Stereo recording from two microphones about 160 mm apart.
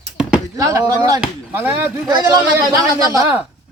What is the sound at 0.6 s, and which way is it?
Speech, 20° right (ahead or behind).